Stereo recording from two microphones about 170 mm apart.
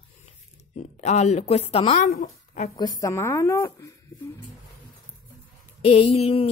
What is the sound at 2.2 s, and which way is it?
Speech, 50° left (ahead or behind).